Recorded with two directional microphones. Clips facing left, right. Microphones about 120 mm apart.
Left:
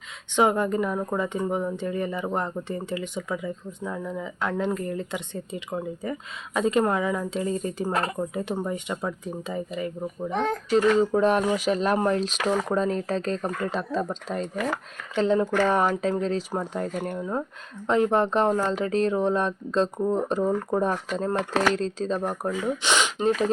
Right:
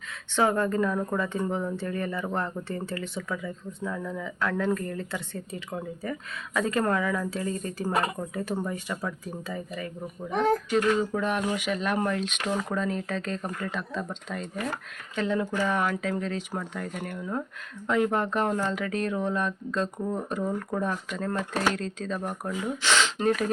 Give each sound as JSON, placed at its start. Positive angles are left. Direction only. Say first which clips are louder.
{"t": 0.3, "sound": "speech", "louder": "left 2 dB", "side_deg": 15}
{"t": 14.4, "sound": "speech", "louder": "left 4 dB", "side_deg": 90}
{"t": 15.1, "sound": "speech", "louder": "left 6 dB", "side_deg": 30}
{"t": 22.8, "sound": "speech", "louder": "right 1 dB", "side_deg": 15}